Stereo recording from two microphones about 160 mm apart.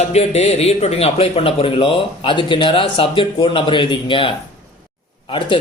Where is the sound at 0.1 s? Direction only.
40° left (ahead or behind).